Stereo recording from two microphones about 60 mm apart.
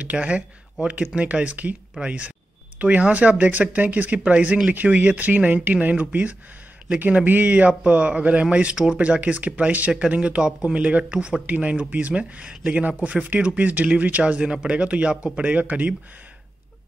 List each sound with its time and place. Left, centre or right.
0.0 s speech: right